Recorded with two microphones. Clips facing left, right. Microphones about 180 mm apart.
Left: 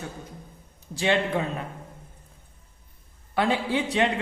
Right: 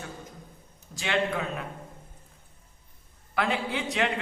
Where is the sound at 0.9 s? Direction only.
30° left (ahead or behind).